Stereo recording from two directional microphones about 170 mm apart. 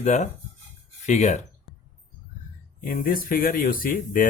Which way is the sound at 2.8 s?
55° left (ahead or behind).